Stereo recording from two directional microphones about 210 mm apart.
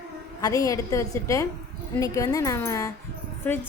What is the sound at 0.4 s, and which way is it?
A woman's voice, 15° left (ahead or behind).